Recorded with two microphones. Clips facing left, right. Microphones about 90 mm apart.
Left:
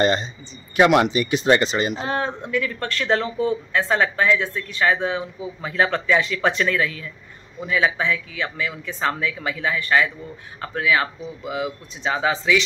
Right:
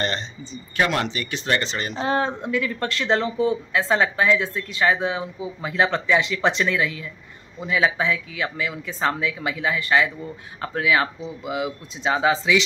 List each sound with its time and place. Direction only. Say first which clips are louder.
0.0 s speech: left 7 dB; 15° left (ahead or behind)
2.0 s speech: right 2 dB; 25° right (ahead or behind)